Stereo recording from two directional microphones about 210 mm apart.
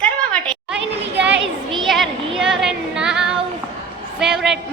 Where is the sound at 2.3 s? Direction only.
Centre (ahead or behind).